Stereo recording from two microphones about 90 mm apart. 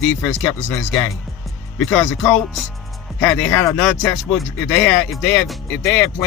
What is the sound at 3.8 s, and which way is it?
Speech, 10° left (ahead or behind).